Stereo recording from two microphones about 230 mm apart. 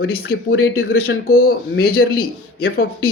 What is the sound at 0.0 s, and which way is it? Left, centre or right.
Speech, left.